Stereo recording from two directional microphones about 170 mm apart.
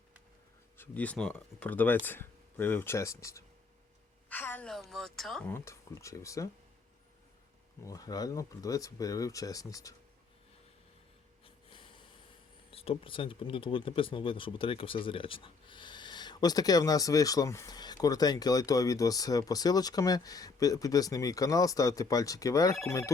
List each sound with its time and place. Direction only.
0.8 s a woman's voice: 10° left (ahead or behind)
5.5 s speech: 15° left (ahead or behind)
7.9 s speech: 20° left (ahead or behind)
11.4 s snort: 30° left (ahead or behind)
12.7 s speech: 35° left (ahead or behind); by 23.1 s 20° left (ahead or behind)